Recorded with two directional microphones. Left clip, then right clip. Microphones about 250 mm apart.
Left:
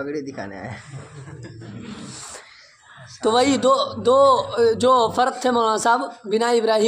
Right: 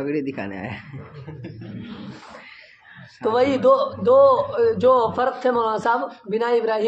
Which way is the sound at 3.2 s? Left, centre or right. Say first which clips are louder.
Even; left.